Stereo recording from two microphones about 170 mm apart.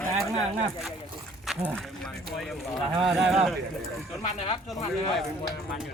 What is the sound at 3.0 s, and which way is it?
Speech, centre (ahead or behind).